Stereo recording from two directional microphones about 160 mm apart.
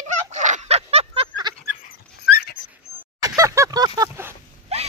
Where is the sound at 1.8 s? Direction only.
70° left (ahead or behind).